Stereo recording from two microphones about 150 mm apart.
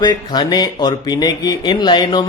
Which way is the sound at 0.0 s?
30° left (ahead or behind).